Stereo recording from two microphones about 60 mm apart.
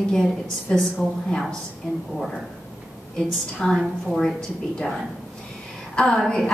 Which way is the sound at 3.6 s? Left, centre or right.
Centre.